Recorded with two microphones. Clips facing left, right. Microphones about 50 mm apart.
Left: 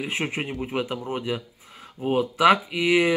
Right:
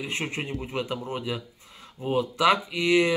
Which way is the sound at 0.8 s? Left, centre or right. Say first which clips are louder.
Left 2 dB; centre.